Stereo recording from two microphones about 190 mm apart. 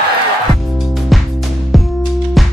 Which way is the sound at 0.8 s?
Centre (ahead or behind).